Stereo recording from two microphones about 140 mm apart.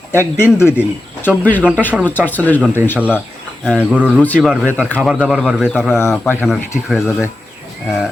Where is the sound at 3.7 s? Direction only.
10° right (ahead or behind).